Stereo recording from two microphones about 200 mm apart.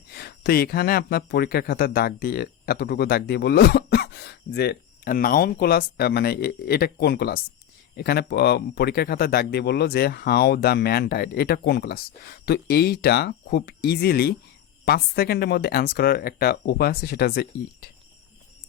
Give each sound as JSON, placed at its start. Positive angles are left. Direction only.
{"t": 0.1, "sound": "speech", "side_deg": 50}